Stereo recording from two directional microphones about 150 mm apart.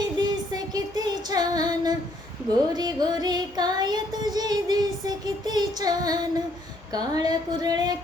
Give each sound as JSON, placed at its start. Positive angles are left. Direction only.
{"t": 0.0, "sound": "child singing", "side_deg": -25}